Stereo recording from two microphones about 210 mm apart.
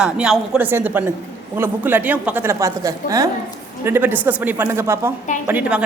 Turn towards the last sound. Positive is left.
turn(degrees=-10)  # may be behind; listen again after turning